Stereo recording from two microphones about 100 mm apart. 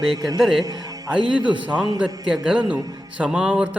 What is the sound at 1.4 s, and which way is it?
Speech, 50° right (ahead or behind).